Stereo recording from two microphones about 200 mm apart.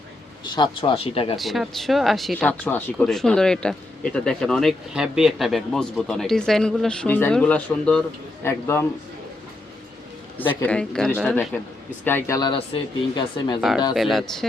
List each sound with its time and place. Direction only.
0.4 s speech: 20° left (ahead or behind)
1.4 s a man's voice: centre (ahead or behind)
10.5 s speech: 10° left (ahead or behind)
12.0 s speech: 15° left (ahead or behind)
13.6 s speech: centre (ahead or behind)